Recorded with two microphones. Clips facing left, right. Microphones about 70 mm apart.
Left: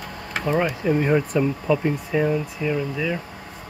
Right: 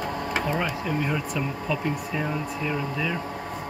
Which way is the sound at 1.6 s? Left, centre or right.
Centre.